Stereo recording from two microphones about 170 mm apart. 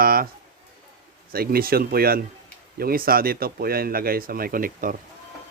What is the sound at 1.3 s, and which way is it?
Speech, 60° right (ahead or behind).